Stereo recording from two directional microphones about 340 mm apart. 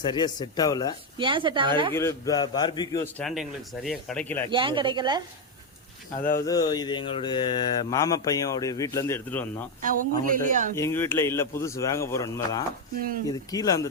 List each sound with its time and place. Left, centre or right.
0.0 s speech: centre
1.2 s speech: centre
1.9 s speech: centre
4.5 s speech: centre
6.4 s speech: centre
9.8 s speech: right
10.8 s speech: centre